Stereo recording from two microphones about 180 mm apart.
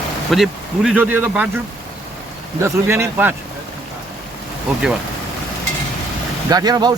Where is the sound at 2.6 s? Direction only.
15° right (ahead or behind).